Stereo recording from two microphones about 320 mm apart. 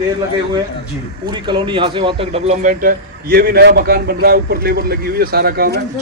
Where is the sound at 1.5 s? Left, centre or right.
Centre.